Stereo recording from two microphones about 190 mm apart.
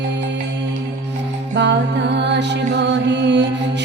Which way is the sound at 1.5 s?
65° right (ahead or behind).